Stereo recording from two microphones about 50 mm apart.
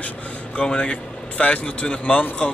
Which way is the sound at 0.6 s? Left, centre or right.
Centre.